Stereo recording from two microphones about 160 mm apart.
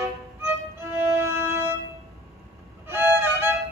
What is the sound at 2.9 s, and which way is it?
Violin, 15° right (ahead or behind).